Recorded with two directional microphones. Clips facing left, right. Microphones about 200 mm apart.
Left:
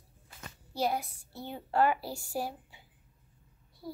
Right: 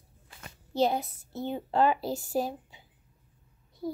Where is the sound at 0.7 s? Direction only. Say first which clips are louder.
Right 5 dB; 25° right (ahead or behind).